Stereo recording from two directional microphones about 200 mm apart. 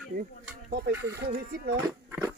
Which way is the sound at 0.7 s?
50° right (ahead or behind).